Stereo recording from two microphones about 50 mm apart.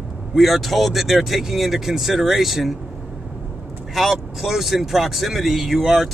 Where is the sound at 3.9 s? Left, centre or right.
Centre.